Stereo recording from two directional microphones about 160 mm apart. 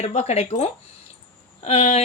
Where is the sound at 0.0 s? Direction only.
45° left (ahead or behind).